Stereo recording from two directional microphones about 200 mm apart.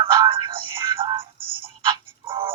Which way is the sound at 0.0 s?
25° right (ahead or behind).